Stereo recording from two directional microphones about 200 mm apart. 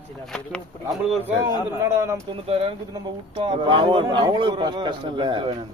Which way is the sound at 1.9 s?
15° right (ahead or behind).